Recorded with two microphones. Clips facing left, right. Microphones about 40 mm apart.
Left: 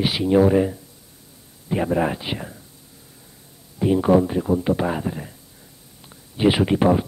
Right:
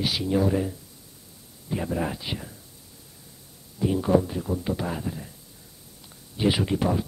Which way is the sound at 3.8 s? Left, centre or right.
Left.